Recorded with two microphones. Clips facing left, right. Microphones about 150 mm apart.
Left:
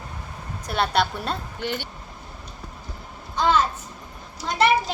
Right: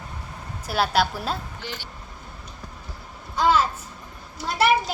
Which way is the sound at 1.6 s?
60° left (ahead or behind).